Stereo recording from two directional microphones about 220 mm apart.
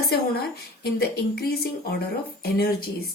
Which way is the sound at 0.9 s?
45° left (ahead or behind).